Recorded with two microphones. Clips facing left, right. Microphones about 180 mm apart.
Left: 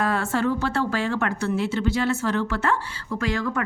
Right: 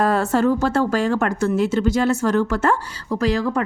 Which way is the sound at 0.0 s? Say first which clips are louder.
Right 6 dB; 40° right (ahead or behind).